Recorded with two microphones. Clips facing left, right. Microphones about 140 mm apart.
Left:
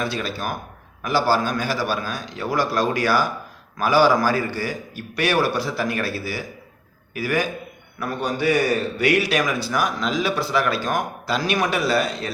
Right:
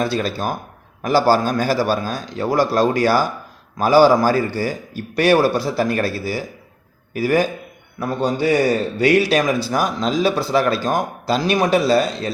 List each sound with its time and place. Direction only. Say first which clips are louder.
0.0 s a man's voice: right 5 dB; 35° right (ahead or behind)